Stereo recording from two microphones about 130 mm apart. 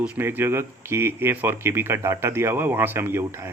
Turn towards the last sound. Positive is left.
turn(degrees=-15)  # may be behind; listen again after turning